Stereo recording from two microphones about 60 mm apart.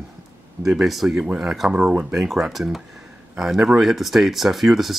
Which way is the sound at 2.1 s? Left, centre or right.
Centre.